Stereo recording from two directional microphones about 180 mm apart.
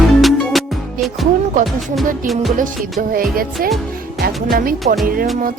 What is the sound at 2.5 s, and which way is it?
A woman's voice, 50° right (ahead or behind).